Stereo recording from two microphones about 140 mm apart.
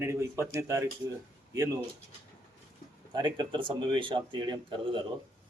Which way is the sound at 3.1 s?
35° right (ahead or behind).